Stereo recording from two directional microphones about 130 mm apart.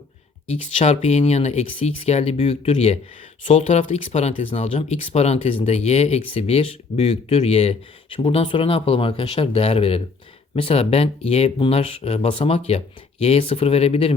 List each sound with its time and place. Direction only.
0.5 s speech: 55° left (ahead or behind)